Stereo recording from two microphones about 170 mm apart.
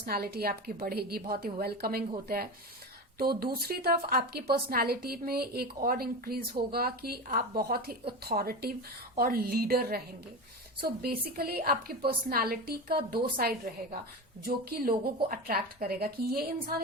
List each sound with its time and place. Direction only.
0.0 s a woman's voice: 65° right (ahead or behind)
11.0 s a woman's voice: 65° right (ahead or behind)